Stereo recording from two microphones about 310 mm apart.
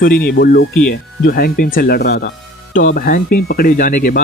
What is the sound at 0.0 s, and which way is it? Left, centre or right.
Speech, left.